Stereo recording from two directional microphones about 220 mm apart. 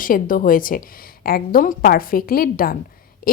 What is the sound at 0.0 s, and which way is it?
A woman's voice, 40° left (ahead or behind).